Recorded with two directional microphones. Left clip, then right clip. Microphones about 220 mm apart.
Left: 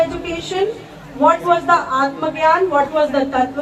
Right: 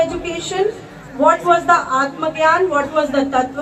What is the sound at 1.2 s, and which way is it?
A woman's voice, 45° right (ahead or behind).